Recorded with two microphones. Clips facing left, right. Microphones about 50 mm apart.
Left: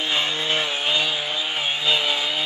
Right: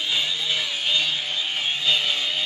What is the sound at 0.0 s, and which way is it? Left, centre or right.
Chainsaw, left.